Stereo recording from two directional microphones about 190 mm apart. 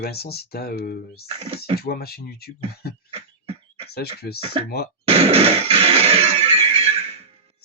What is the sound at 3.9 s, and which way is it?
Speech, 55° left (ahead or behind).